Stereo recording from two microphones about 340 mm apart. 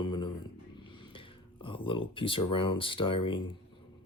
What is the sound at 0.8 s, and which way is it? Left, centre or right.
Music, centre.